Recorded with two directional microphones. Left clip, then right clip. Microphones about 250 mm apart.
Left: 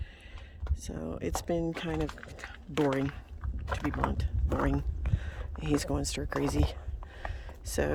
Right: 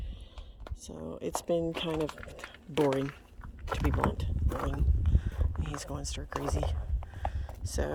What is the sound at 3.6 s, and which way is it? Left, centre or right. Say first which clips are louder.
Speech: right 1 dB; right.